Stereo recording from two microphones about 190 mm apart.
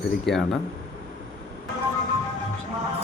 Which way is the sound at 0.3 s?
Centre (ahead or behind).